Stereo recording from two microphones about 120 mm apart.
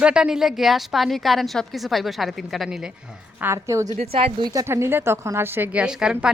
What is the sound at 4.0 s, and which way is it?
Speech, 55° right (ahead or behind).